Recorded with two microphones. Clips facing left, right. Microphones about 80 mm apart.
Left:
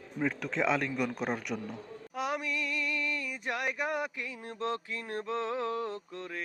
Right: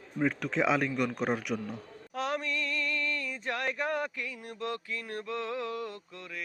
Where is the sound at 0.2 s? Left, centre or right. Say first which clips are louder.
Right 2 dB; centre.